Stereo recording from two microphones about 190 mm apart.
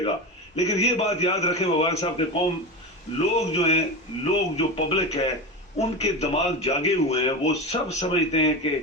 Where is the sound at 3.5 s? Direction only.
35° left (ahead or behind).